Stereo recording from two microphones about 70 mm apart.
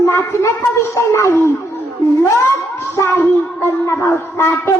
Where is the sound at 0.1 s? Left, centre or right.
Left.